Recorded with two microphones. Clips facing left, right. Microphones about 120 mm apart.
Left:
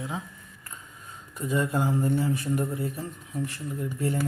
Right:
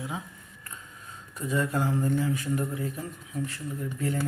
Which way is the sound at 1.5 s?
15° left (ahead or behind).